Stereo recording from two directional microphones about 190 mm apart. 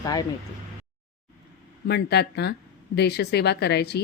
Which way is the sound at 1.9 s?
60° left (ahead or behind).